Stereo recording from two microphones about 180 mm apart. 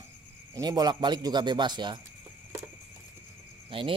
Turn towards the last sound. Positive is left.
turn(degrees=-30)  # may be behind; listen again after turning